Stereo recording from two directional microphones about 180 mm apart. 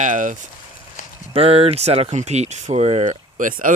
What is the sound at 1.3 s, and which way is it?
Speech, 30° right (ahead or behind).